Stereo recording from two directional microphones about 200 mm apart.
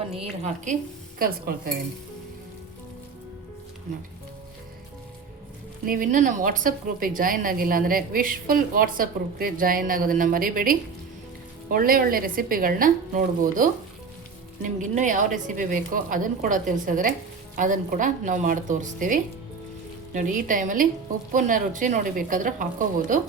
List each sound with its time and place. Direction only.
0.4 s a woman's voice: 40° right (ahead or behind)
5.8 s a woman's voice: 45° right (ahead or behind)